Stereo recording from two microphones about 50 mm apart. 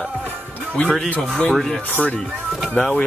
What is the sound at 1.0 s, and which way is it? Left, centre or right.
Speech, left.